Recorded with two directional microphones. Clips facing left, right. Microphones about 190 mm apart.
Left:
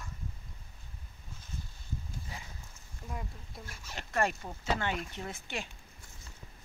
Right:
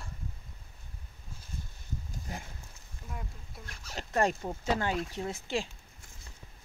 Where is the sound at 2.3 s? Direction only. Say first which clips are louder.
Right 8 dB; 45° right (ahead or behind).